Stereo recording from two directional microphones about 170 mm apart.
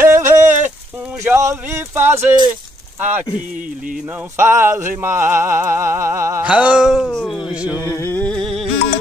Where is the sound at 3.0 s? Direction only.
10° right (ahead or behind).